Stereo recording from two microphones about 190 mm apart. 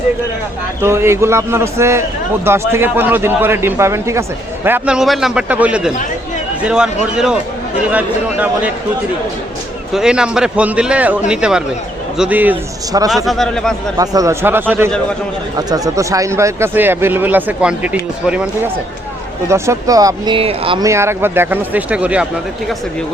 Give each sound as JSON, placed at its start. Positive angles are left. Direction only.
{"t": 0.8, "sound": "a man's voice", "side_deg": -15}
{"t": 9.9, "sound": "a man's voice", "side_deg": -5}
{"t": 13.2, "sound": "a man's voice", "side_deg": 0}
{"t": 14.0, "sound": "a man's voice", "side_deg": -20}
{"t": 19.5, "sound": "speech", "side_deg": -15}
{"t": 20.8, "sound": "a man's voice", "side_deg": -15}